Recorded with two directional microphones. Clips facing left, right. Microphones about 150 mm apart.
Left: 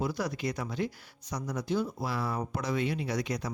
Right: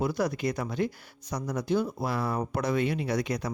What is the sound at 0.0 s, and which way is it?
Speech, 55° right (ahead or behind).